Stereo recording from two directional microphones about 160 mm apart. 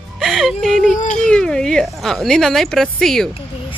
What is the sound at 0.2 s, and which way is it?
Speech, centre (ahead or behind).